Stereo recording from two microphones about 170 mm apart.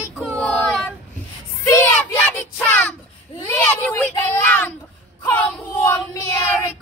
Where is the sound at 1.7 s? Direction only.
15° left (ahead or behind).